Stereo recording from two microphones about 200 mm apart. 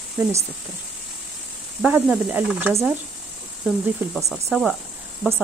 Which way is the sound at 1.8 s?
5° right (ahead or behind).